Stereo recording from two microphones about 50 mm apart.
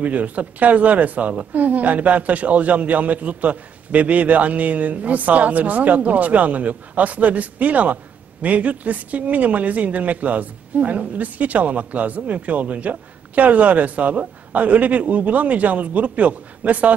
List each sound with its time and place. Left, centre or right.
0.0 s speech: right